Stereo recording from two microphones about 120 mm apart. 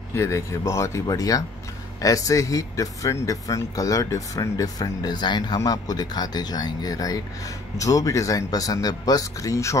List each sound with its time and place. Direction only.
0.1 s speech: 25° left (ahead or behind)